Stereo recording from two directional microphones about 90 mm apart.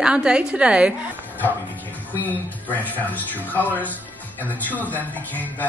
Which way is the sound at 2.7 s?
20° left (ahead or behind).